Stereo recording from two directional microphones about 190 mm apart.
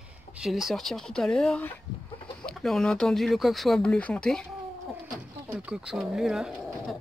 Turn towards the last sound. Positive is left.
turn(degrees=0)  # may be behind; listen again after turning